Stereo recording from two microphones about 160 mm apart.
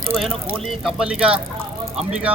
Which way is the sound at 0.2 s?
Centre (ahead or behind).